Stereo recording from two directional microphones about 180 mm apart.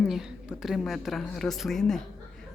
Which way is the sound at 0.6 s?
Centre (ahead or behind).